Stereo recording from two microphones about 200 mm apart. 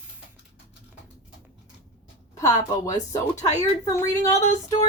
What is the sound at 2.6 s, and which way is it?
Speech, 15° left (ahead or behind).